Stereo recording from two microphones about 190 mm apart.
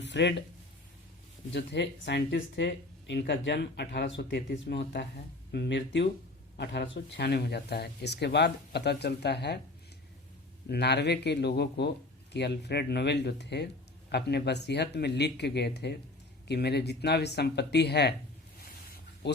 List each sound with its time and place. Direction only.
0.0 s speech: 65° left (ahead or behind)
1.5 s speech: 65° left (ahead or behind)
10.7 s speech: 60° left (ahead or behind)
19.2 s speech: 65° left (ahead or behind)